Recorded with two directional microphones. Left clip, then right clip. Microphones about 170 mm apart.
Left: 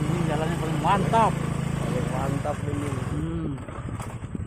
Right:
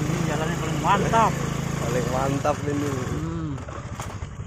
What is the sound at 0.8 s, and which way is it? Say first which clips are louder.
Speech: right 1 dB; 10° right (ahead or behind).